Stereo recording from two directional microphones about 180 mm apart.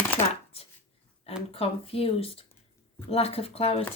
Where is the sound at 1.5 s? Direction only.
35° left (ahead or behind).